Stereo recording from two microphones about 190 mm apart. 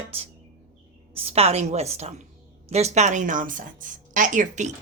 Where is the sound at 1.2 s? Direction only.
35° right (ahead or behind).